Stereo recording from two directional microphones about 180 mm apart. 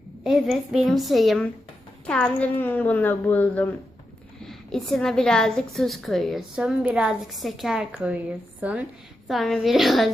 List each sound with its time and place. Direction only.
0.3 s a woman's voice: centre (ahead or behind)